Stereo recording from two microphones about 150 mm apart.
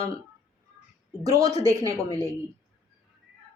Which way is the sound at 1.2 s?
25° right (ahead or behind).